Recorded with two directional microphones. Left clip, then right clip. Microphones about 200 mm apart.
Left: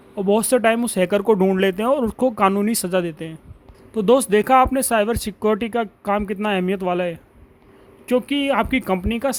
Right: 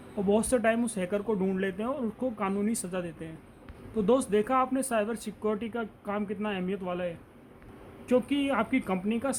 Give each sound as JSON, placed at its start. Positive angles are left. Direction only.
{"t": 0.3, "sound": "speech", "side_deg": 40}